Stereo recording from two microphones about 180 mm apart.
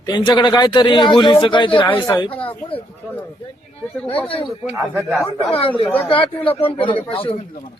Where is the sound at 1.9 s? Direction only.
15° left (ahead or behind).